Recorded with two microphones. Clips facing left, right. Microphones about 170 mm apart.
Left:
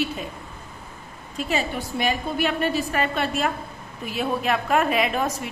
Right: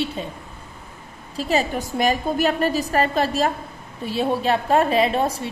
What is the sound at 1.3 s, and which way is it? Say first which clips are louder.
A woman's voice: right 4 dB; 35° right (ahead or behind).